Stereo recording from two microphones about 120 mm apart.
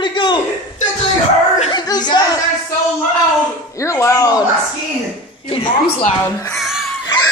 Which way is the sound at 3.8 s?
25° left (ahead or behind).